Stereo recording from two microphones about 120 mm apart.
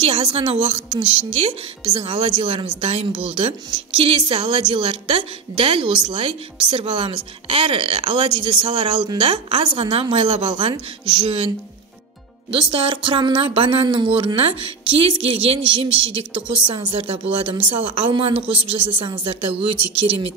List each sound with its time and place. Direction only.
0.0 s a woman's voice: 50° right (ahead or behind)
12.4 s a woman's voice: 50° right (ahead or behind)